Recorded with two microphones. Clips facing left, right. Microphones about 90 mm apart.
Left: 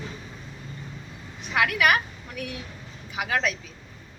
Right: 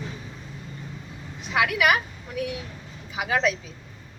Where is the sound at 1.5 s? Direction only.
15° right (ahead or behind).